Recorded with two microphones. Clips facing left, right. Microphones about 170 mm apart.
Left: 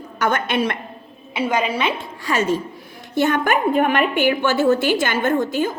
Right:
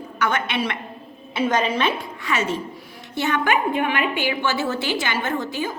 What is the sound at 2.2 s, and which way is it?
A man's voice, 40° left (ahead or behind).